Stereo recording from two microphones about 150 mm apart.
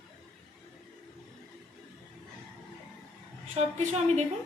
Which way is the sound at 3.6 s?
45° right (ahead or behind).